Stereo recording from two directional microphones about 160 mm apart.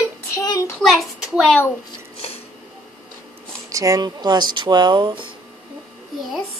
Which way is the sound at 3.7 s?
20° right (ahead or behind).